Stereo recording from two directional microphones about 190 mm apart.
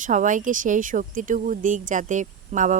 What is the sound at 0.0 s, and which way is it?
Speech, 40° right (ahead or behind).